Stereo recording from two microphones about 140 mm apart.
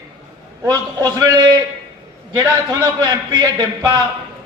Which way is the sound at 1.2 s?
25° right (ahead or behind).